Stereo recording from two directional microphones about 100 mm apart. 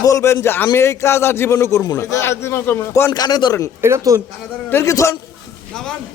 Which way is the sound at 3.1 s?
40° left (ahead or behind).